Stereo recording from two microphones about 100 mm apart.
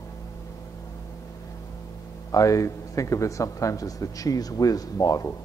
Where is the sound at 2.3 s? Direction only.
35° left (ahead or behind).